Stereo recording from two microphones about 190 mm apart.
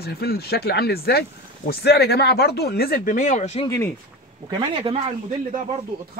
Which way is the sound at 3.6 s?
15° left (ahead or behind).